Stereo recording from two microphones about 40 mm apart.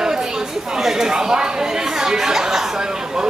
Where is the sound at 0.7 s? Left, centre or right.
Centre.